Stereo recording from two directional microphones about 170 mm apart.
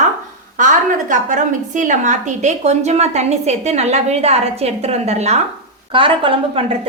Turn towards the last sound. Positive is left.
turn(degrees=-30)  # may be behind; listen again after turning